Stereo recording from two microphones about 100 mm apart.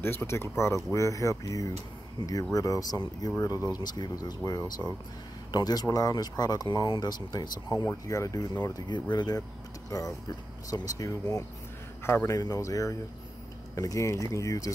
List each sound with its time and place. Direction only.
0.0 s speech: 25° left (ahead or behind); by 9.4 s 45° left (ahead or behind)
9.8 s speech: 35° left (ahead or behind)